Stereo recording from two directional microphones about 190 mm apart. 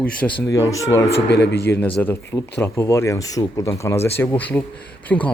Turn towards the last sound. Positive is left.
turn(degrees=10)  # may be behind; listen again after turning